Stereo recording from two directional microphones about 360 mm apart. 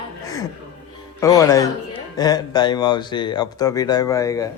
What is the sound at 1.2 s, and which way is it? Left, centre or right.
Speech, centre.